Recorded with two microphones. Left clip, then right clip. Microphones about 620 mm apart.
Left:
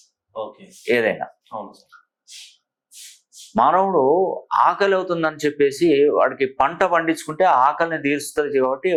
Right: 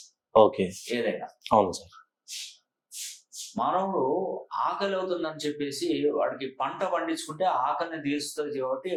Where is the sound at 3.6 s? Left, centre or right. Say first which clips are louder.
Left 10 dB; left.